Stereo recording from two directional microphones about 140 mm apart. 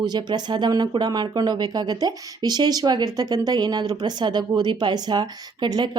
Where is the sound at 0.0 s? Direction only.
30° right (ahead or behind).